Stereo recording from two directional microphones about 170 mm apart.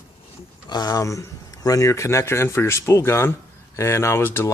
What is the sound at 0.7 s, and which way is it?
Speech, 20° left (ahead or behind).